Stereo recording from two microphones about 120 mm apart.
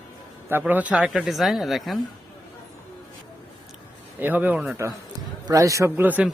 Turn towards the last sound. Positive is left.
turn(degrees=-15)  # may be behind; listen again after turning